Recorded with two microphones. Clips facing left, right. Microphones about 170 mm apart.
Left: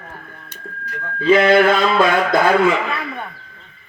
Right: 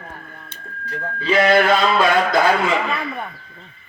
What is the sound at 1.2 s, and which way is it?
Speech, 55° left (ahead or behind).